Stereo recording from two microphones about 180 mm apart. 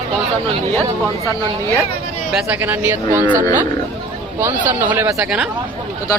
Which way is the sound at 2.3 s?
5° right (ahead or behind).